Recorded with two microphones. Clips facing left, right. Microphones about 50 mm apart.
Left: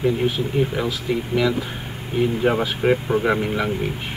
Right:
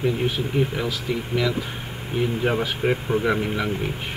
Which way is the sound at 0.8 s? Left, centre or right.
Left.